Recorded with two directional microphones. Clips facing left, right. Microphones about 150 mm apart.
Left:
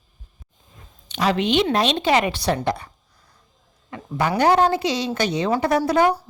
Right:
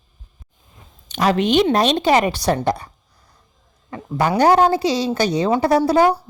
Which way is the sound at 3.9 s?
40° right (ahead or behind).